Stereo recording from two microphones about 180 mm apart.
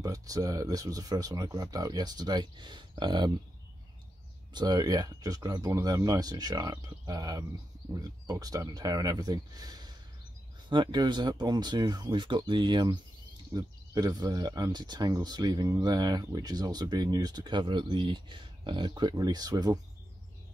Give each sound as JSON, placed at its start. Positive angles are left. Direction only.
{"t": 0.0, "sound": "speech", "side_deg": -20}
{"t": 4.6, "sound": "speech", "side_deg": -20}